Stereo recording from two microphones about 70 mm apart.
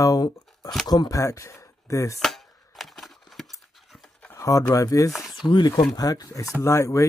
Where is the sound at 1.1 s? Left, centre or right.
Left.